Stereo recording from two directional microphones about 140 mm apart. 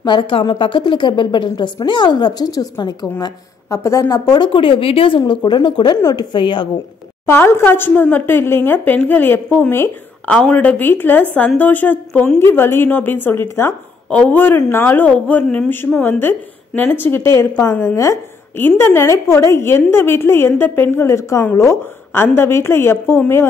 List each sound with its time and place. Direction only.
0.0 s a woman's voice: 35° left (ahead or behind)
7.2 s speech: 15° left (ahead or behind)